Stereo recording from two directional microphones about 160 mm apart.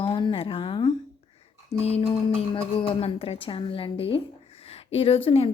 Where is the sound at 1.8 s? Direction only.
40° left (ahead or behind).